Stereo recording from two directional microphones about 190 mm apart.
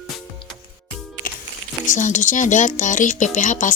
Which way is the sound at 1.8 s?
40° left (ahead or behind).